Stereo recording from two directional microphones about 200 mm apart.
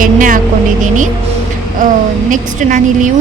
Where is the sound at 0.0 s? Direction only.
40° right (ahead or behind).